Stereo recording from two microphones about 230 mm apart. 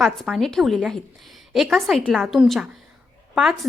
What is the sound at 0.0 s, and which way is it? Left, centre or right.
A woman's voice, centre.